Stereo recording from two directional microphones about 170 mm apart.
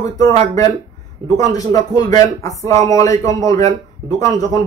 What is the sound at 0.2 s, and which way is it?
Speech, 20° left (ahead or behind).